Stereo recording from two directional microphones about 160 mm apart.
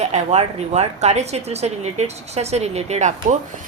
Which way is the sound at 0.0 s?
45° right (ahead or behind).